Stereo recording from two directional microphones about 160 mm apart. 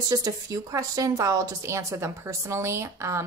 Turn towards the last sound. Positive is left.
turn(degrees=-15)  # may be behind; listen again after turning